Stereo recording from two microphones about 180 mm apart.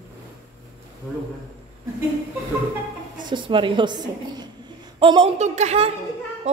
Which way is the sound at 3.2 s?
25° right (ahead or behind).